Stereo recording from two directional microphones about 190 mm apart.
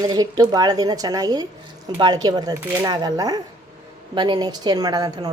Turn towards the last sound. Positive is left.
turn(degrees=-20)  # may be behind; listen again after turning